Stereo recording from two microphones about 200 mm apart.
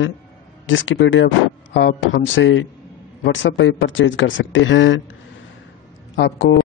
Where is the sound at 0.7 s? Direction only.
70° left (ahead or behind).